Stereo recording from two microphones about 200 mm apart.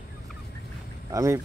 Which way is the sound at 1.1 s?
15° right (ahead or behind).